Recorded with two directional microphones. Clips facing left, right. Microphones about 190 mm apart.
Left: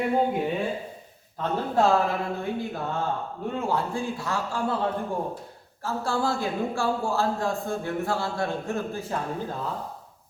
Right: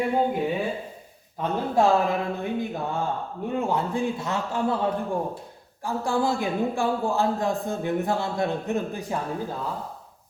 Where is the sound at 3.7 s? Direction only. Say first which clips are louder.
Right 2 dB; 20° right (ahead or behind).